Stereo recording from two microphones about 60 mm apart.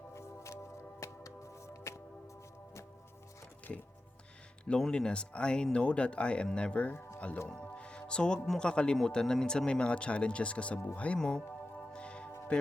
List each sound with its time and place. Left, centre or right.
0.1 s music: left
4.6 s speech: centre
11.2 s speech: centre
11.9 s music: centre